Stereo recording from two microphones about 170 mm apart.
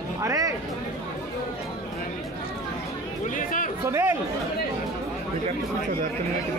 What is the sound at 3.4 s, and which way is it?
Chatter, 50° left (ahead or behind).